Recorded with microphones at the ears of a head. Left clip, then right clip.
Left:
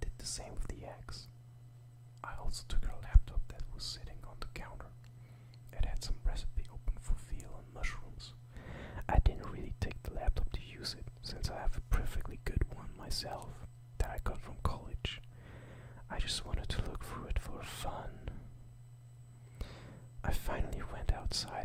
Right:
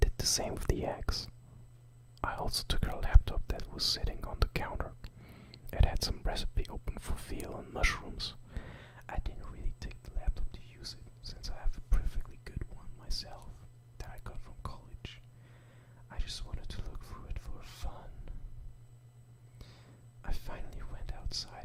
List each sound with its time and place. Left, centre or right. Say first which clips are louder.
0.0 s speech: right 12 dB; right
8.9 s speech: left 9 dB; left
12.2 s whispering: left 7 dB; left
13.2 s speech: left 8 dB; left
19.5 s whispering: left 6 dB; left